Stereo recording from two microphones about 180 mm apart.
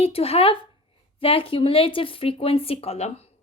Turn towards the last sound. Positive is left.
turn(degrees=35)  # may be behind; listen again after turning